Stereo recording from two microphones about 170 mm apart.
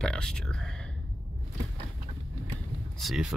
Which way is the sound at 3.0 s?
Centre (ahead or behind).